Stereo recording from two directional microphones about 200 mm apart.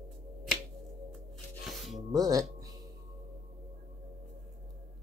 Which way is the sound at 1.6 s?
Centre (ahead or behind).